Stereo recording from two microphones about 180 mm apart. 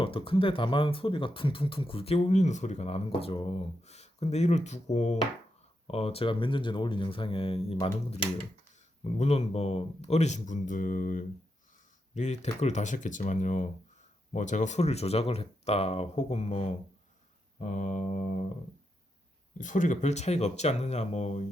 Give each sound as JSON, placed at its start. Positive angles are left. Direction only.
{"t": 0.0, "sound": "speech", "side_deg": 30}
{"t": 19.5, "sound": "speech", "side_deg": 45}